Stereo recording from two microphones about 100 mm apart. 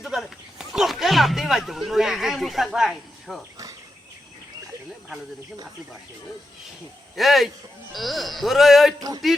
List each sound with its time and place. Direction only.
0.0 s speech: centre (ahead or behind)
7.2 s speech: centre (ahead or behind)
9.0 s speech: 40° right (ahead or behind)